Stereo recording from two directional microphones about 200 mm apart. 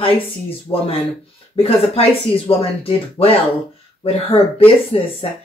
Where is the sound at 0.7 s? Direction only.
20° left (ahead or behind).